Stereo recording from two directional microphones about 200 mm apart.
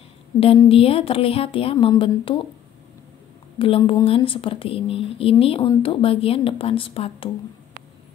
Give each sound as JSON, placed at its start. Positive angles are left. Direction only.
{"t": 0.4, "sound": "speech", "side_deg": 30}
{"t": 3.5, "sound": "speech", "side_deg": 25}